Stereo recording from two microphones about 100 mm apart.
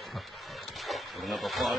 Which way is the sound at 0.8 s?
Centre (ahead or behind).